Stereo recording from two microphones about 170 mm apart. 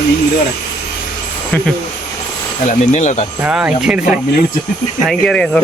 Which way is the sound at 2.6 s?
45° left (ahead or behind).